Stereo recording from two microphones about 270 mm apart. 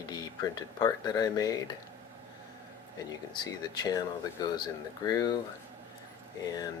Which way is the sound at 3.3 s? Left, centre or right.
Centre.